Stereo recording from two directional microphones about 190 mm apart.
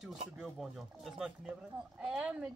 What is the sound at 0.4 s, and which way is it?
Speech, centre (ahead or behind).